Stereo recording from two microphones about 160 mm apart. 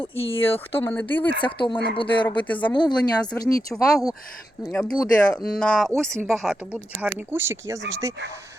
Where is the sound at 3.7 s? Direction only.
5° left (ahead or behind).